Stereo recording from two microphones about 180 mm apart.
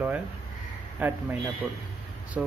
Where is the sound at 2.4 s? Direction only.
5° right (ahead or behind).